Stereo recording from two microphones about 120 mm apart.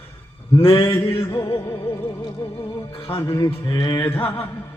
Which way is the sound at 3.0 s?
20° left (ahead or behind).